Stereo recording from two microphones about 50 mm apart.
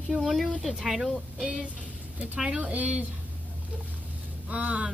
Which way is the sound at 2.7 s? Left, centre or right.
Right.